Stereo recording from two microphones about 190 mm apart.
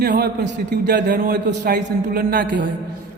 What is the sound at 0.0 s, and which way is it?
A man's voice, 55° right (ahead or behind).